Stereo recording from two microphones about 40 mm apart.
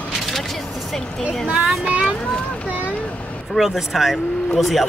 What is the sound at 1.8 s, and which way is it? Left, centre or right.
Speech, right.